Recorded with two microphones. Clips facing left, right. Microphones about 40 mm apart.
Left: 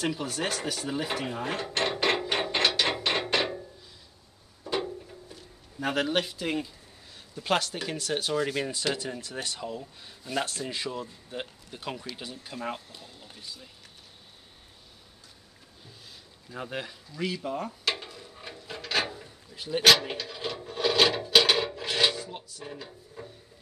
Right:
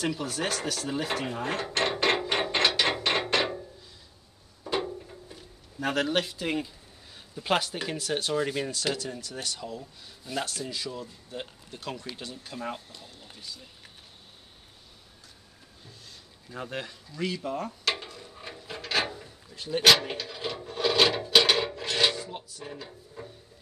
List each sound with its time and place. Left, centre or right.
0.0 s dishes: centre
4.6 s a sound: centre
5.8 s speech: centre
8.9 s speech: left
10.7 s speech: left
11.7 s speech: centre
16.4 s speech: centre
17.9 s a sound: centre
20.1 s filing: centre